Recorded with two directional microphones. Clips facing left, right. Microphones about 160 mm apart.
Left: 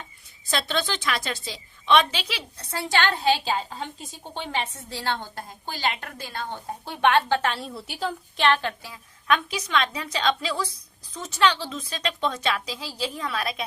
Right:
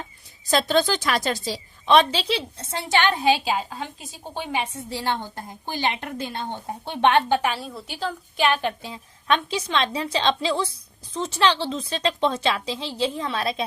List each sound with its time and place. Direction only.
0.4 s a woman's voice: 40° right (ahead or behind); by 7.5 s 20° right (ahead or behind)
7.5 s a woman's voice: centre (ahead or behind)
8.4 s a woman's voice: 10° right (ahead or behind); by 13.7 s 25° right (ahead or behind)